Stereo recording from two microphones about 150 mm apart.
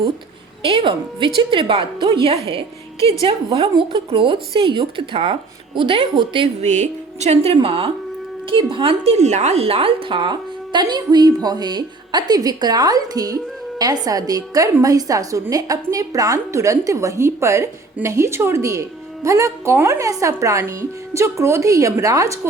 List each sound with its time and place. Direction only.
0.7 s a woman's voice: 35° right (ahead or behind)
6.6 s a woman's voice: 50° right (ahead or behind); by 22.4 s 20° right (ahead or behind)